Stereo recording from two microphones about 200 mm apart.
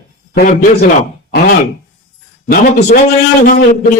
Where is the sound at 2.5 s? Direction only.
45° left (ahead or behind).